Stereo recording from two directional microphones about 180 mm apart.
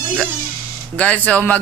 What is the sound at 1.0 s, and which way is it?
Speech, 5° left (ahead or behind).